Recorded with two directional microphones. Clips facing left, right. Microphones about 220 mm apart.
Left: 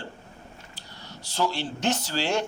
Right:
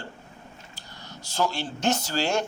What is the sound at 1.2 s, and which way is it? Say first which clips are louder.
Speech: even; 45° right (ahead or behind).